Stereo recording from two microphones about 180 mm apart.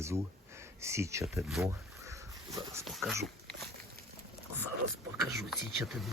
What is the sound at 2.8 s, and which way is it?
Speech, centre (ahead or behind).